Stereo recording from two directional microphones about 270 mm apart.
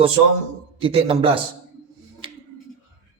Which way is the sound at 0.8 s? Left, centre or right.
Centre.